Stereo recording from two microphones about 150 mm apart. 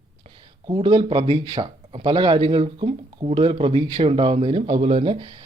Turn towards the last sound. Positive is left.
turn(degrees=-35)  # may be behind; listen again after turning